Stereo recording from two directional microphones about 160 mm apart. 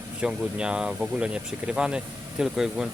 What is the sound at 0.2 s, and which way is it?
Speech, 5° right (ahead or behind).